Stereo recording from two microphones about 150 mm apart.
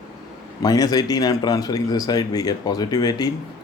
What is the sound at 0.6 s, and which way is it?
Speech, 25° left (ahead or behind).